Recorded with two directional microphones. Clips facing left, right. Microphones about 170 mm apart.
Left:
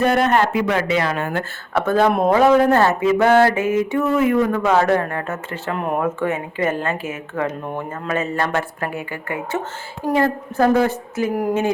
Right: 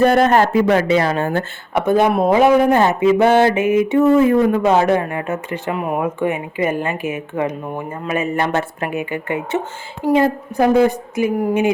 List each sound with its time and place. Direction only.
0.0 s speech: 35° right (ahead or behind)
1.7 s a woman's voice: 15° right (ahead or behind)
4.0 s a woman's voice: 30° right (ahead or behind); by 11.3 s 15° right (ahead or behind)